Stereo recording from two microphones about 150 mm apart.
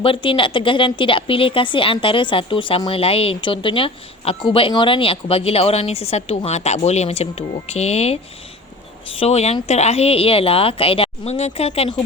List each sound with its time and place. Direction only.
0.0 s speech: 35° left (ahead or behind)